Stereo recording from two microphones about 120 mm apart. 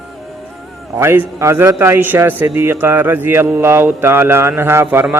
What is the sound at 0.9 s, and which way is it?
A man's voice, 20° right (ahead or behind).